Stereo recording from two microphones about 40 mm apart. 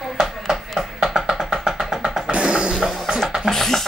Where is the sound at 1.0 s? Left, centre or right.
Centre.